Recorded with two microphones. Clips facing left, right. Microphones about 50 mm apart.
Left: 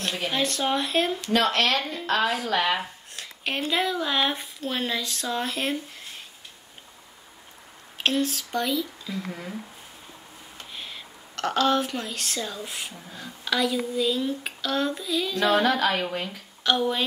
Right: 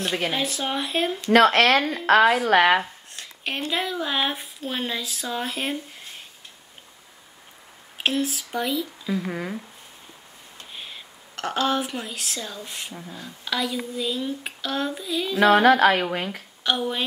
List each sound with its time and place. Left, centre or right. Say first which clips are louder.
0.3 s speech: left 1 dB; centre
1.3 s speech: right 7 dB; right
2.8 s speech: right 1 dB; centre
8.0 s speech: even; centre
9.3 s speech: right 5 dB; right
10.7 s speech: even; centre
15.6 s speech: right 6 dB; right
16.6 s speech: left 1 dB; centre